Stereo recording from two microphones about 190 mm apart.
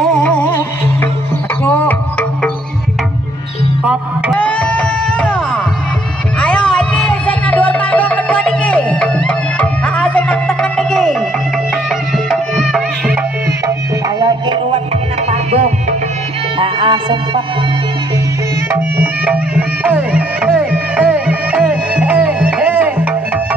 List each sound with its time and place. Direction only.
0.0 s music: 5° left (ahead or behind)
1.6 s music: 10° left (ahead or behind)
3.8 s music: 5° right (ahead or behind)
4.4 s music: 5° left (ahead or behind)
12.3 s music: centre (ahead or behind)
13.7 s music: 20° right (ahead or behind)
15.5 s music: 40° right (ahead or behind)
16.5 s music: 25° right (ahead or behind)
18.7 s music: 10° right (ahead or behind)